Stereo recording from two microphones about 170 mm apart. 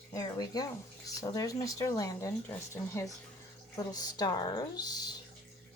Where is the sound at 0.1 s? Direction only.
20° left (ahead or behind).